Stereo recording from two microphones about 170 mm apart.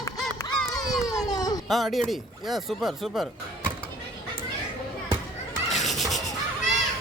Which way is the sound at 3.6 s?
30° right (ahead or behind).